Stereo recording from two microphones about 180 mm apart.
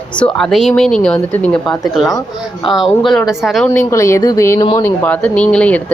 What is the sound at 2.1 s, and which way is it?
Speech, 20° left (ahead or behind).